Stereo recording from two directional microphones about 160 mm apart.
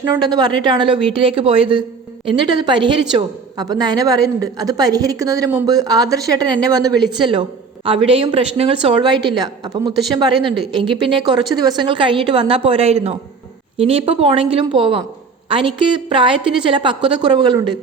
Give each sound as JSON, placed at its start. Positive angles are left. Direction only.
{"t": 0.2, "sound": "a woman's voice", "side_deg": -25}